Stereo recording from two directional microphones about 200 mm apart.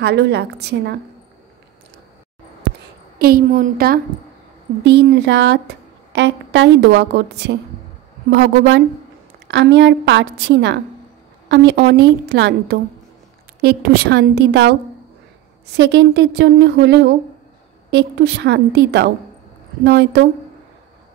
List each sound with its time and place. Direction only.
0.0 s a woman's voice: 55° right (ahead or behind)
3.2 s a woman's voice: 50° right (ahead or behind)
4.8 s a woman's voice: 60° right (ahead or behind)